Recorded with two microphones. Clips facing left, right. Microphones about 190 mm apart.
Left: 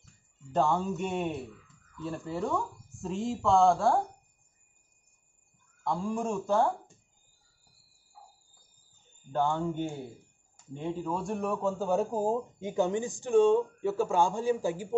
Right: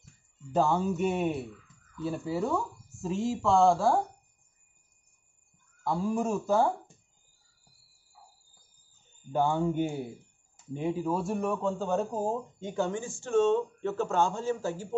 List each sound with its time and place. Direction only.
0.5 s speech: 5° right (ahead or behind)
5.9 s speech: 5° right (ahead or behind)
8.2 s cricket: 50° left (ahead or behind)
9.3 s speech: 10° right (ahead or behind); by 15.0 s 15° left (ahead or behind)